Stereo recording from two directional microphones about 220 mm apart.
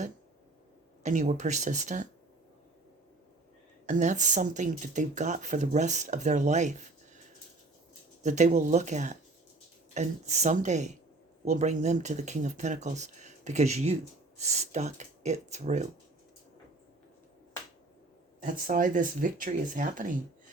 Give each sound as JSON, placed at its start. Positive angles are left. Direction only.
{"t": 1.0, "sound": "speech", "side_deg": -35}
{"t": 3.8, "sound": "speech", "side_deg": -35}
{"t": 8.2, "sound": "speech", "side_deg": -35}
{"t": 18.3, "sound": "speech", "side_deg": -35}